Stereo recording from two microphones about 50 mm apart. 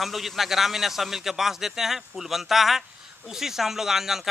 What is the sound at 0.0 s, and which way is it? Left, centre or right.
Speech, centre.